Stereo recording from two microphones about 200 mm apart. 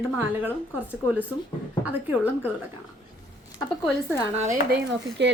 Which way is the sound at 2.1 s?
10° right (ahead or behind).